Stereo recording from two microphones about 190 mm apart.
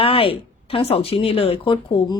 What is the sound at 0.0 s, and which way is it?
Speech, 30° left (ahead or behind).